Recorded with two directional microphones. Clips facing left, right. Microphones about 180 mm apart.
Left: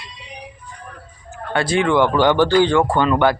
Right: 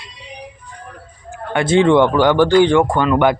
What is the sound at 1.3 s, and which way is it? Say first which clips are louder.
Speech: right 4 dB; 15° right (ahead or behind).